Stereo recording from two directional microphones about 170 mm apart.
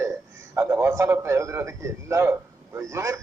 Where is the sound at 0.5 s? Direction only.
15° right (ahead or behind).